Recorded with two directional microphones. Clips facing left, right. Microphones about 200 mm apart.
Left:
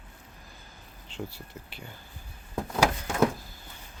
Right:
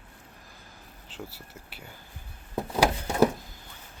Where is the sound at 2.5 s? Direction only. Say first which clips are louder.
Right 1 dB; 10° right (ahead or behind).